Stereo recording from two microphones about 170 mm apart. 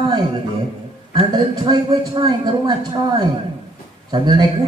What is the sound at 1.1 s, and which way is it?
Mantra, 25° right (ahead or behind).